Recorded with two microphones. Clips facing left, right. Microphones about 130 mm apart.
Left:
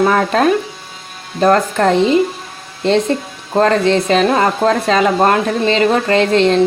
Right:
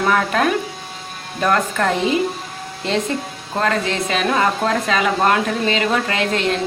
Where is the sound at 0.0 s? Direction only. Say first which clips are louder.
Left 5 dB; 35° left (ahead or behind).